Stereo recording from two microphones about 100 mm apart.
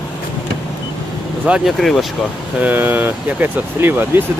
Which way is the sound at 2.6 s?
20° right (ahead or behind).